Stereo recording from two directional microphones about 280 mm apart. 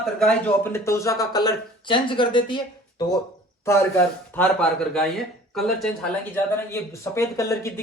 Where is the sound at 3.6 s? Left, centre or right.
Centre.